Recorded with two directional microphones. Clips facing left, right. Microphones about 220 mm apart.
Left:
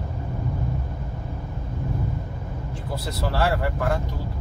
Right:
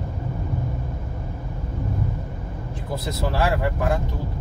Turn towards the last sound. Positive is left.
turn(degrees=-15)  # may be behind; listen again after turning